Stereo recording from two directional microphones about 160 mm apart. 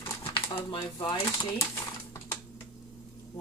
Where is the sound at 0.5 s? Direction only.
35° left (ahead or behind).